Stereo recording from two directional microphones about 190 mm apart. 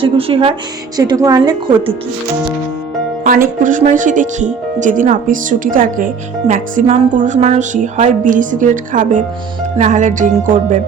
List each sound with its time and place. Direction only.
0.0 s a woman's voice: 30° right (ahead or behind)
3.6 s speech: 40° right (ahead or behind)
9.7 s music: 40° right (ahead or behind)